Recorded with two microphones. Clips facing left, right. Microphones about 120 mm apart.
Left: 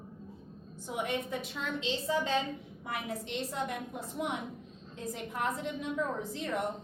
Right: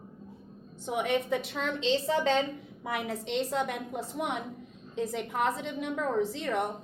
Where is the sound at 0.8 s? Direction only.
90° right.